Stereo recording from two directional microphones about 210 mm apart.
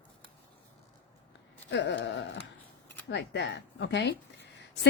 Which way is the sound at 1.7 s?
55° left (ahead or behind).